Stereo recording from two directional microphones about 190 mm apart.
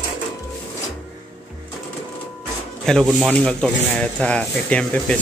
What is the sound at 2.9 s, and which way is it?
Speech, centre (ahead or behind).